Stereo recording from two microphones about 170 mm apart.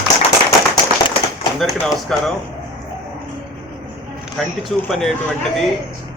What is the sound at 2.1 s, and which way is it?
Speech, 5° left (ahead or behind).